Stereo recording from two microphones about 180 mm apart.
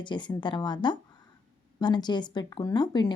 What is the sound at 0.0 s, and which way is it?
A woman's voice, 25° left (ahead or behind).